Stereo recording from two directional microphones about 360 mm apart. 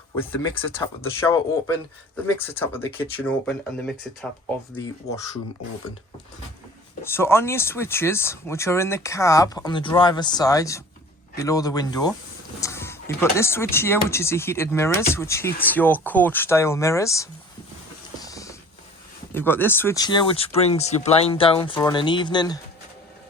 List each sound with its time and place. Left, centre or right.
1.2 s speech: centre
7.1 s speech: centre
18.2 s a sound: centre
19.3 s speech: centre